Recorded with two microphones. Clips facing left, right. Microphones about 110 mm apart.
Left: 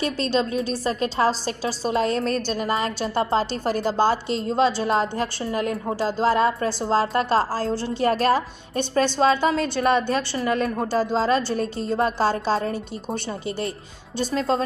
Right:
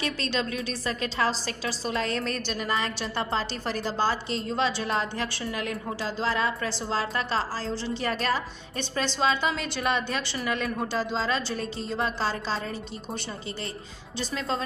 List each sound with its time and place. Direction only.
0.0 s a woman's voice: 35° left (ahead or behind)